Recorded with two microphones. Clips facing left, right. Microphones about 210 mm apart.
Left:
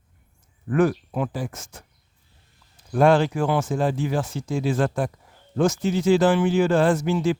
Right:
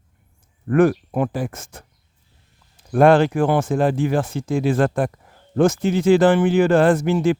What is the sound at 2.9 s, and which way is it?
Speech, 60° right (ahead or behind).